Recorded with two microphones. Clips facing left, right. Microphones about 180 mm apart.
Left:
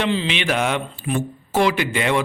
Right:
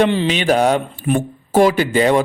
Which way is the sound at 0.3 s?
40° right (ahead or behind).